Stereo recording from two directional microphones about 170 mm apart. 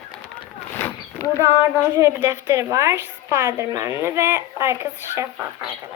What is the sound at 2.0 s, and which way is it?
Speech, 15° right (ahead or behind).